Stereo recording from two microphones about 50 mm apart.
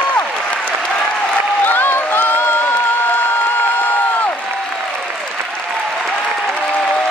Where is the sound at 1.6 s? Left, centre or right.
Left.